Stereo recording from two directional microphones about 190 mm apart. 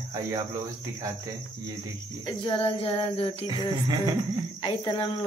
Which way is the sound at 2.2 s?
25° left (ahead or behind).